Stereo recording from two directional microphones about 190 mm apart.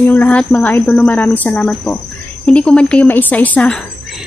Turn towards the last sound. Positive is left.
turn(degrees=5)  # may be behind; listen again after turning